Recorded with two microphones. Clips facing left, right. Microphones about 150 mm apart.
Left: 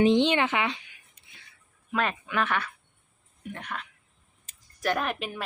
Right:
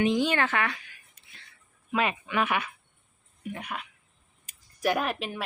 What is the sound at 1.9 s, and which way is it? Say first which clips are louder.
A woman's voice: right 1 dB; 5° right (ahead or behind).